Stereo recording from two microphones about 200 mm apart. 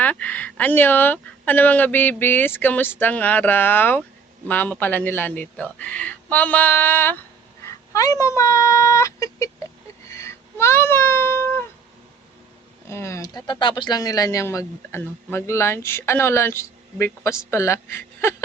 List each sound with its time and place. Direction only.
0.0 s speech: 10° left (ahead or behind)
10.1 s a sound: 15° left (ahead or behind)
12.9 s speech: 15° left (ahead or behind)